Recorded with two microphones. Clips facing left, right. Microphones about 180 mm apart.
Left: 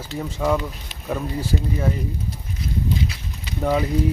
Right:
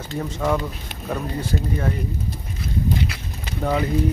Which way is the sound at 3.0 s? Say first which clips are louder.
Right 1 dB; 65° right (ahead or behind).